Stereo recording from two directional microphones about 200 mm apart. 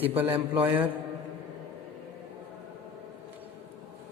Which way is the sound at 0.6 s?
10° right (ahead or behind).